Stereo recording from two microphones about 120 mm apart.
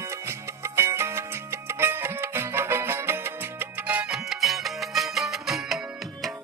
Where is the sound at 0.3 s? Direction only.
25° right (ahead or behind); by 5.8 s centre (ahead or behind).